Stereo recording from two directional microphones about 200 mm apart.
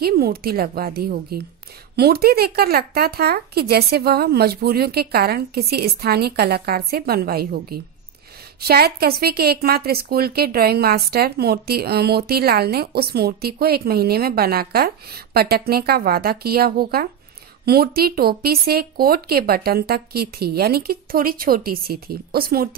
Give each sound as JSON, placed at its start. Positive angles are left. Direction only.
{"t": 0.0, "sound": "a woman's voice", "side_deg": -50}